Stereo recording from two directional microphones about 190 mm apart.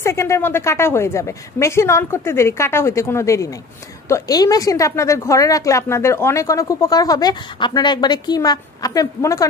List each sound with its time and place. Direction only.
0.0 s a woman's voice: 15° left (ahead or behind)